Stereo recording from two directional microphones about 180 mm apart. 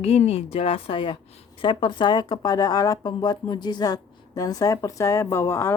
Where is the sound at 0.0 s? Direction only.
35° left (ahead or behind).